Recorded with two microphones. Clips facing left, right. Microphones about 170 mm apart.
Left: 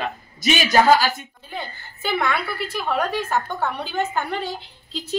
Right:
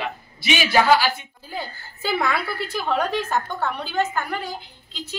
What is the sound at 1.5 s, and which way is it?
Speech, 5° right (ahead or behind).